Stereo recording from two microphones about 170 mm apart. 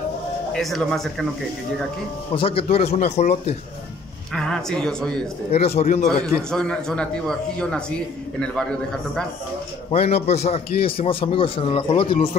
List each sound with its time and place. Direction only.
0.5 s a man's voice: centre (ahead or behind)
2.3 s a man's voice: 35° left (ahead or behind)
4.3 s a man's voice: 5° left (ahead or behind)
5.5 s a man's voice: 40° left (ahead or behind)
6.5 s a man's voice: 5° left (ahead or behind)
9.8 s a man's voice: 35° left (ahead or behind)